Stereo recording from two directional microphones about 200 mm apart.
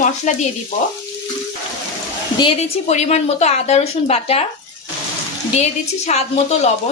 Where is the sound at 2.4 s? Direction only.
35° left (ahead or behind).